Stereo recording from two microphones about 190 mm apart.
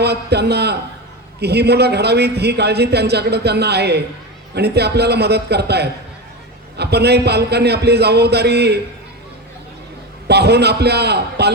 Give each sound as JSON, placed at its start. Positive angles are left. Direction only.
{"t": 0.0, "sound": "a man's voice", "side_deg": -60}
{"t": 10.2, "sound": "a man's voice", "side_deg": -60}